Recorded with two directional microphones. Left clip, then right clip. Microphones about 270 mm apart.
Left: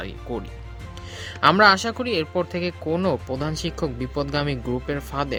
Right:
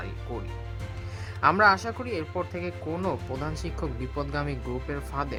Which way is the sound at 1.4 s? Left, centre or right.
Left.